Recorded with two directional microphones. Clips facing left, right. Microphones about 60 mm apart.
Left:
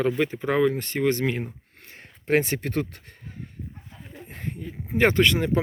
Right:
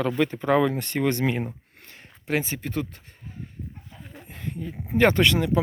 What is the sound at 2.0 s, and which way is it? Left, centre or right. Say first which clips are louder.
Speech: left 4 dB; left.